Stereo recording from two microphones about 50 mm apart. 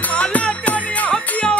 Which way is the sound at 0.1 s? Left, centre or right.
Left.